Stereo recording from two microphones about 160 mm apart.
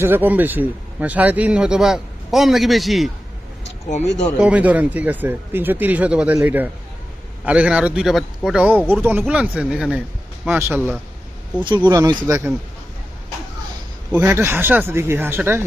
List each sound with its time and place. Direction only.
0.0 s speech: 10° right (ahead or behind)
3.8 s speech: 50° left (ahead or behind)
4.4 s speech: 10° right (ahead or behind)
11.9 s speech: 25° right (ahead or behind)
14.1 s speech: 10° right (ahead or behind)